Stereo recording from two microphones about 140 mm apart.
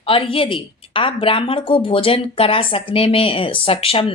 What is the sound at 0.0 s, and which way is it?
A woman's voice, 40° left (ahead or behind).